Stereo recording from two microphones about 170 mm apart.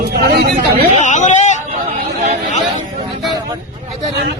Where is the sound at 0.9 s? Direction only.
45° left (ahead or behind).